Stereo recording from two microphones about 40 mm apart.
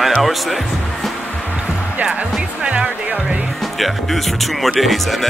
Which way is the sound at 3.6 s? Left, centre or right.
Centre.